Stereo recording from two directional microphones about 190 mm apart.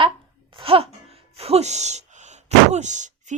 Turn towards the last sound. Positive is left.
turn(degrees=-40)  # may be behind; listen again after turning